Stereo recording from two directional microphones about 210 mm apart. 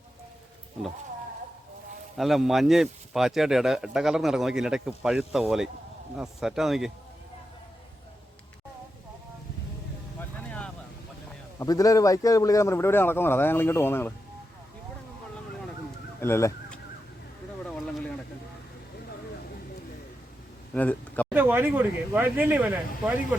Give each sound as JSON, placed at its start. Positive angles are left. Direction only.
{"t": 2.1, "sound": "a man's voice", "side_deg": 0}
{"t": 10.2, "sound": "vehicle", "side_deg": 5}
{"t": 11.6, "sound": "a man's voice", "side_deg": 15}
{"t": 16.2, "sound": "fowl", "side_deg": 10}
{"t": 17.7, "sound": "a sound", "side_deg": 0}
{"t": 20.7, "sound": "speech", "side_deg": 5}
{"t": 21.3, "sound": "speech", "side_deg": -10}